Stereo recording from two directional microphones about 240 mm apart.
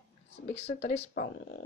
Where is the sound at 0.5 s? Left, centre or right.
Left.